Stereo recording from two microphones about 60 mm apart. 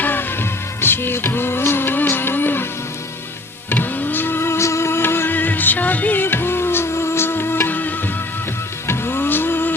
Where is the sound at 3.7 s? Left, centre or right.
Left.